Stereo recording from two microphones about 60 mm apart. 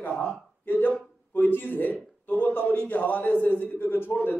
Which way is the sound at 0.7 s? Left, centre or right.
Left.